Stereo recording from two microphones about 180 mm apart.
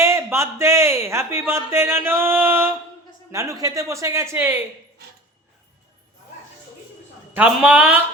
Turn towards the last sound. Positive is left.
turn(degrees=-5)  # may be behind; listen again after turning